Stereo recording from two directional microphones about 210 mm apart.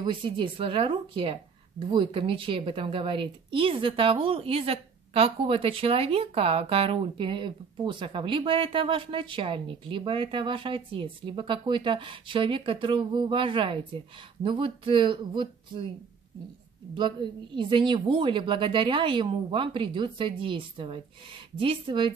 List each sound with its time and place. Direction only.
0.0 s speech: 25° right (ahead or behind)
16.9 s speech: 20° right (ahead or behind)